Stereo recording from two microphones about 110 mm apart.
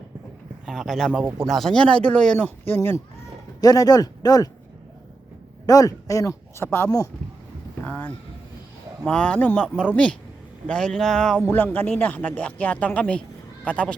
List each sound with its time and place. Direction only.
0.6 s speech: centre (ahead or behind); by 3.0 s 20° left (ahead or behind)
3.6 s speech: 35° left (ahead or behind)
5.6 s speech: 30° left (ahead or behind)
7.9 s a sound: 15° left (ahead or behind)
9.0 s speech: 10° left (ahead or behind)
11.4 s speech: 15° left (ahead or behind)